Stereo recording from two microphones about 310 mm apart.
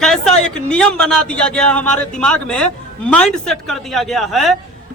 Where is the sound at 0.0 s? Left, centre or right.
Centre.